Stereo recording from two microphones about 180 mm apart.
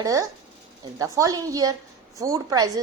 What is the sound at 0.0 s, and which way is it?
A woman's voice, 20° right (ahead or behind).